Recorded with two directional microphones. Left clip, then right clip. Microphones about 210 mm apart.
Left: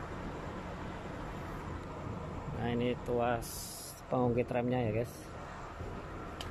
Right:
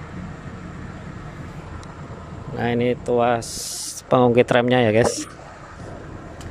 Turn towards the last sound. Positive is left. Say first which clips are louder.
# right 17 dB
turn(degrees=-35)  # may be behind; listen again after turning